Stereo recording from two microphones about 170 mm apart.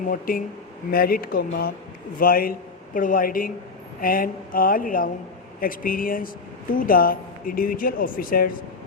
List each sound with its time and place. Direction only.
0.1 s a man's voice: 55° left (ahead or behind)